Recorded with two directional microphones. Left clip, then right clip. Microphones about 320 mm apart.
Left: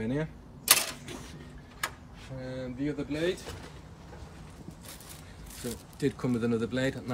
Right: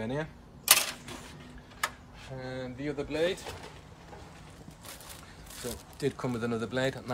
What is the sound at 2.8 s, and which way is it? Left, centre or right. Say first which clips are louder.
Speech: right 2 dB; right.